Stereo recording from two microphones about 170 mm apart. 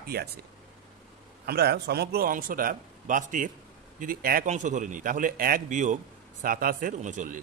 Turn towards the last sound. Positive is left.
turn(degrees=-45)  # may be behind; listen again after turning